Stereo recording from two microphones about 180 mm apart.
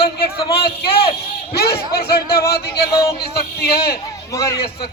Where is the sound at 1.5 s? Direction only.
60° left (ahead or behind).